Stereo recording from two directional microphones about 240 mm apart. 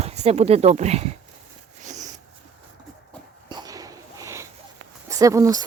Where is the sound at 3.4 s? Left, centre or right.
Centre.